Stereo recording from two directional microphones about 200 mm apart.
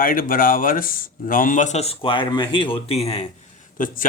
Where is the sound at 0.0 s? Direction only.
45° left (ahead or behind).